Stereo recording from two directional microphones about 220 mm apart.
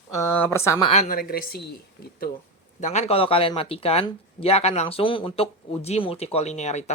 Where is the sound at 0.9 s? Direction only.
35° left (ahead or behind).